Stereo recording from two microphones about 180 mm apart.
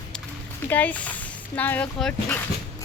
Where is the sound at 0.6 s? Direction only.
10° left (ahead or behind).